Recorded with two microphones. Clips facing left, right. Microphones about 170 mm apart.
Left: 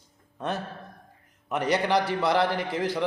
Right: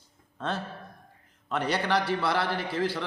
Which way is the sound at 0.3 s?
15° left (ahead or behind).